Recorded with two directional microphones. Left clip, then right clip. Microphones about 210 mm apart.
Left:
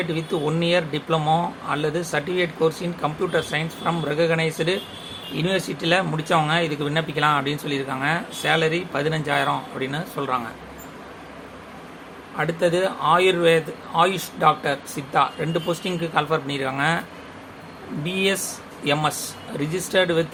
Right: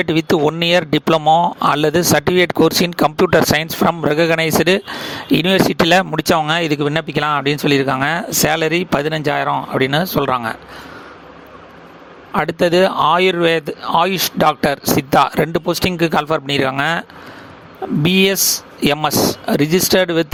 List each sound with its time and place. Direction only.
0.0 s speech: 50° right (ahead or behind)
12.4 s speech: 50° right (ahead or behind)
18.0 s speech: 50° right (ahead or behind)
19.5 s speech: 50° right (ahead or behind)